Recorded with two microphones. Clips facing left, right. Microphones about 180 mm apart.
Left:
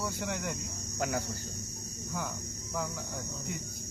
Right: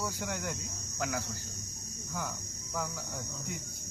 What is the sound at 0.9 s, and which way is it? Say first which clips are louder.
Speech: left 2 dB; 25° left (ahead or behind).